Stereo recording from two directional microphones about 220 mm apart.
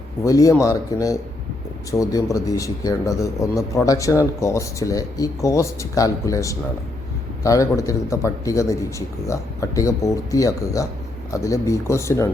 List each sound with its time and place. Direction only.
0.3 s speech: 15° left (ahead or behind)